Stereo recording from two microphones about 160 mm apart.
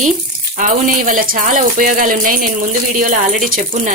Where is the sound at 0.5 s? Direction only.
55° right (ahead or behind).